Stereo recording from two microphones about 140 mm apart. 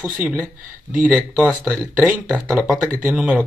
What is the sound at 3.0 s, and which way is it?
Speech, 10° right (ahead or behind).